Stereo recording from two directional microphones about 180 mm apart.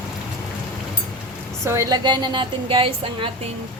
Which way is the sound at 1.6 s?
20° right (ahead or behind).